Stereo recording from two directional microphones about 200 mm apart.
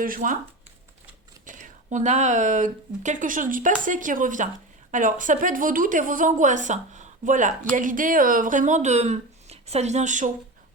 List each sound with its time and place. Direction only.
0.0 s speech: 45° right (ahead or behind)
1.5 s speech: 40° right (ahead or behind)